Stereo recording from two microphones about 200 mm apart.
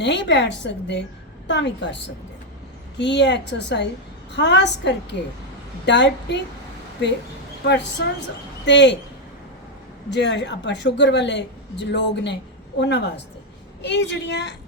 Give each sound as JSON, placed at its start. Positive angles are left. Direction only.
{"t": 0.0, "sound": "a woman's voice", "side_deg": 60}
{"t": 3.0, "sound": "a woman's voice", "side_deg": 60}
{"t": 7.6, "sound": "a woman's voice", "side_deg": 60}
{"t": 10.1, "sound": "a woman's voice", "side_deg": 60}